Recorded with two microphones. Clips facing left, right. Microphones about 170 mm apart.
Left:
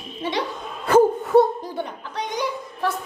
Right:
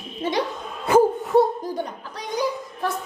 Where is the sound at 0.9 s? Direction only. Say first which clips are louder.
Left 2 dB; centre (ahead or behind).